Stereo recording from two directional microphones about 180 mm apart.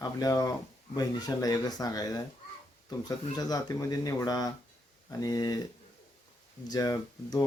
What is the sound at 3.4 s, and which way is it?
Speech, 20° left (ahead or behind).